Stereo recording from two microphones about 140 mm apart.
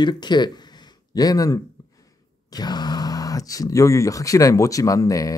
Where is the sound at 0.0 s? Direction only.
30° left (ahead or behind).